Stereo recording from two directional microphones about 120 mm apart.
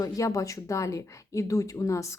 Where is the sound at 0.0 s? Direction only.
30° left (ahead or behind).